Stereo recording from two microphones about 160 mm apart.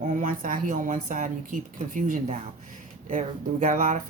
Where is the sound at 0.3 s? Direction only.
60° right (ahead or behind).